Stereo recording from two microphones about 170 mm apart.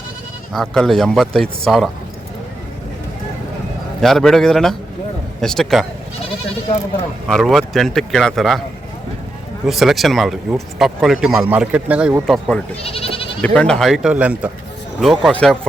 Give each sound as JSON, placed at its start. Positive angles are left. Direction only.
{"t": 0.5, "sound": "speech", "side_deg": 0}
{"t": 4.0, "sound": "speech", "side_deg": 0}
{"t": 7.3, "sound": "speech", "side_deg": 0}
{"t": 9.6, "sound": "speech", "side_deg": 0}
{"t": 12.2, "sound": "speech", "side_deg": 5}
{"t": 12.8, "sound": "goat", "side_deg": 35}
{"t": 13.4, "sound": "speech", "side_deg": 5}